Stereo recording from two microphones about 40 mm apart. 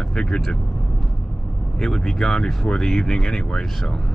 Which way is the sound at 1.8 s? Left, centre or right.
Centre.